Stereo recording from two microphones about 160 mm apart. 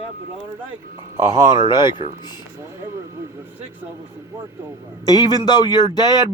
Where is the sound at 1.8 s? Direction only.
30° left (ahead or behind).